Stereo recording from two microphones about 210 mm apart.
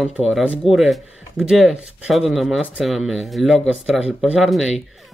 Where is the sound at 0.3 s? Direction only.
Centre (ahead or behind).